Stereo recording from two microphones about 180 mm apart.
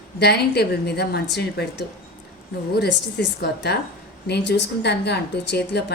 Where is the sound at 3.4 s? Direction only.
65° left (ahead or behind).